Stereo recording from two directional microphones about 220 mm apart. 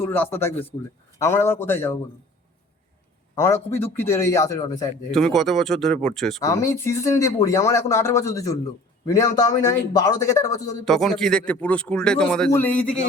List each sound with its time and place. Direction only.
0.0 s speech: 10° left (ahead or behind)
3.3 s speech: 10° left (ahead or behind)
5.1 s speech: centre (ahead or behind)
6.4 s speech: 15° left (ahead or behind)
10.8 s speech: centre (ahead or behind)